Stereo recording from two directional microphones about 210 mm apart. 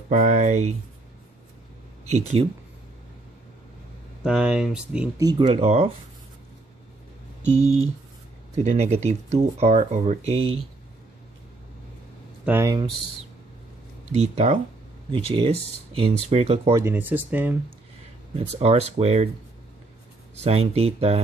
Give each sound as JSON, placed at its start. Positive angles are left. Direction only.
{"t": 0.1, "sound": "speech", "side_deg": -35}
{"t": 4.2, "sound": "speech", "side_deg": -5}
{"t": 5.2, "sound": "speech", "side_deg": -25}
{"t": 7.4, "sound": "speech", "side_deg": -30}
{"t": 12.4, "sound": "speech", "side_deg": -15}
{"t": 14.1, "sound": "speech", "side_deg": -30}
{"t": 16.7, "sound": "speech", "side_deg": -10}
{"t": 18.3, "sound": "speech", "side_deg": -30}
{"t": 20.4, "sound": "speech", "side_deg": -30}